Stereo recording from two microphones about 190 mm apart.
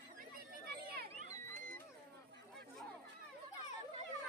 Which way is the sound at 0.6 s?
55° right (ahead or behind).